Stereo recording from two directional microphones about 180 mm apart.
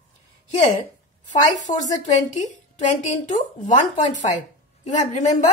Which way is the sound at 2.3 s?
40° left (ahead or behind).